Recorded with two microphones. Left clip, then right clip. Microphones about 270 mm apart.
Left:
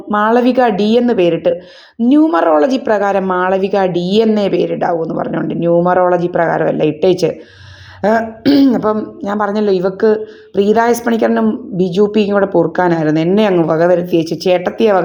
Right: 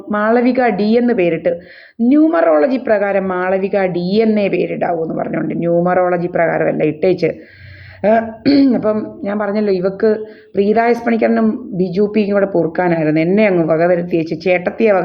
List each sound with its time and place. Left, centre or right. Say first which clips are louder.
0.1 s speech: left 2 dB; centre